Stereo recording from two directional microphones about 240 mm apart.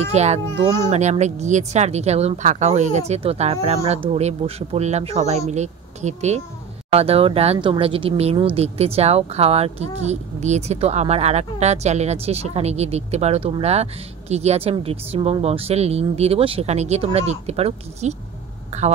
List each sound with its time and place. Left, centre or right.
0.0 s speech: right
0.6 s a child's voice: centre
0.8 s speech: right